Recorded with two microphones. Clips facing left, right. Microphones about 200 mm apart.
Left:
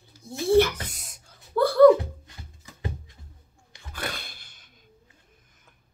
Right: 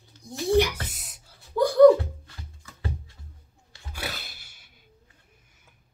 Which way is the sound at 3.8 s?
10° right (ahead or behind).